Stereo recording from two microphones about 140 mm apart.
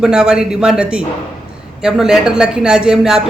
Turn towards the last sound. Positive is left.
turn(degrees=-5)  # may be behind; listen again after turning